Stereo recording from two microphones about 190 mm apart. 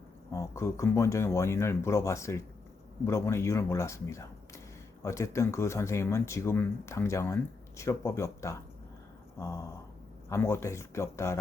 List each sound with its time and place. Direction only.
0.3 s speech: 15° left (ahead or behind)